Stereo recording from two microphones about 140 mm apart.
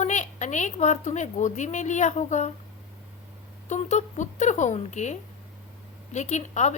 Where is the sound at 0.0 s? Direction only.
60° left (ahead or behind).